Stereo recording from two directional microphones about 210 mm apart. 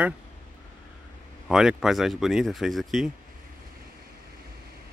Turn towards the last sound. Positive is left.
turn(degrees=0)  # may be behind; listen again after turning